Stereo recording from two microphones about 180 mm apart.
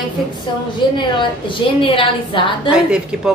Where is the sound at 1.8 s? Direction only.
30° left (ahead or behind).